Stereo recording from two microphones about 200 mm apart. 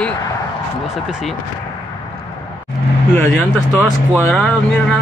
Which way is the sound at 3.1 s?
10° left (ahead or behind).